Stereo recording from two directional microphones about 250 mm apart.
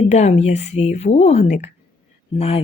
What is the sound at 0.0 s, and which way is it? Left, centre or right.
A woman's voice, left.